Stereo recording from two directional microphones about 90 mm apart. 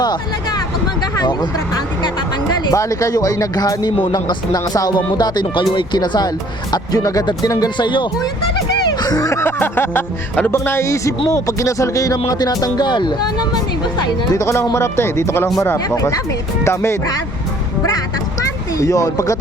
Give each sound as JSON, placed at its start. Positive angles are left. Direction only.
{"t": 0.0, "sound": "speech", "side_deg": 50}
{"t": 7.8, "sound": "speech", "side_deg": 60}
{"t": 8.9, "sound": "music", "side_deg": 45}
{"t": 9.4, "sound": "music", "side_deg": 25}
{"t": 10.7, "sound": "speech", "side_deg": 30}
{"t": 14.3, "sound": "speech", "side_deg": 30}
{"t": 16.6, "sound": "speech", "side_deg": 30}
{"t": 18.8, "sound": "speech", "side_deg": 40}